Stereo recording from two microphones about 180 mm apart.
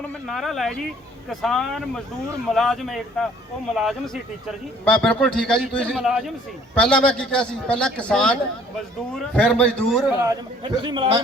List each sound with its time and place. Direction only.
0.3 s a man's voice: centre (ahead or behind)
10.2 s a man's voice: 25° right (ahead or behind)